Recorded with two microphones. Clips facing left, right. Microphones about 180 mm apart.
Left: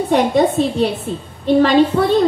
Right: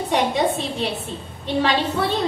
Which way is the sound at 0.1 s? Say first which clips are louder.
Left 6 dB; 50° left (ahead or behind).